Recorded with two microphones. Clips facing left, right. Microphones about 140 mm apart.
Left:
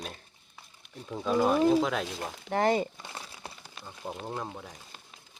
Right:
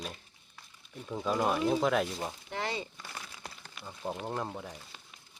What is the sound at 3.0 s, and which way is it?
Crumpling, 25° left (ahead or behind).